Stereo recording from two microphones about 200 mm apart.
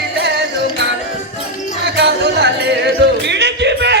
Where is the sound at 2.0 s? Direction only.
55° right (ahead or behind).